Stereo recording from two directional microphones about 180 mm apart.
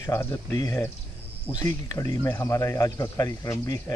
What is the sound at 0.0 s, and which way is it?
Speech, 15° left (ahead or behind).